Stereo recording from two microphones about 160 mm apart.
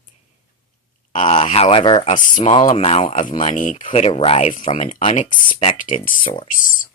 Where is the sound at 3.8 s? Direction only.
35° left (ahead or behind).